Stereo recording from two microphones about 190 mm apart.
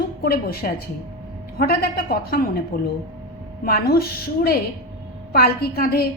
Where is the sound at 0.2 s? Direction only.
55° left (ahead or behind).